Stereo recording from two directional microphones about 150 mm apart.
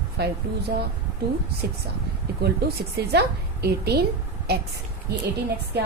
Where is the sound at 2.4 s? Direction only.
90° right.